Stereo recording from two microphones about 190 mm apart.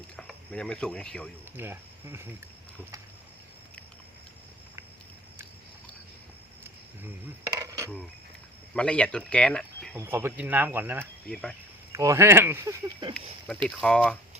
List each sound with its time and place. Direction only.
0.2 s speech: 5° left (ahead or behind)
1.5 s speech: 10° right (ahead or behind)
7.6 s dishes: 20° right (ahead or behind)
8.7 s speech: 5° left (ahead or behind)
9.9 s speech: 10° right (ahead or behind)
11.0 s speech: 5° left (ahead or behind)
11.9 s speech: 15° right (ahead or behind)
13.7 s speech: 5° left (ahead or behind)